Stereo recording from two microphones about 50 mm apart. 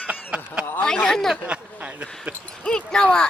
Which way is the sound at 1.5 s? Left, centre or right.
Right.